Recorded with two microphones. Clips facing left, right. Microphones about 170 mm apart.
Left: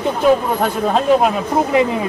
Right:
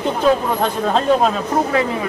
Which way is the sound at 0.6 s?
10° left (ahead or behind).